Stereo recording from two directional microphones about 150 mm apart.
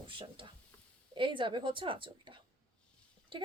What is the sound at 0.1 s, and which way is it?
A woman's voice, 35° right (ahead or behind).